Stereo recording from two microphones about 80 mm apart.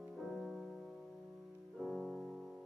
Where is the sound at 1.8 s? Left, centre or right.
Centre.